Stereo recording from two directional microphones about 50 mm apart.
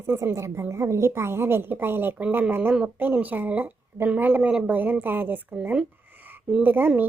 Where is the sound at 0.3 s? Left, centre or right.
Right.